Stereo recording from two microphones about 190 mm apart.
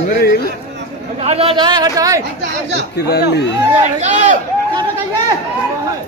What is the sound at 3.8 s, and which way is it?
Speech, 40° right (ahead or behind).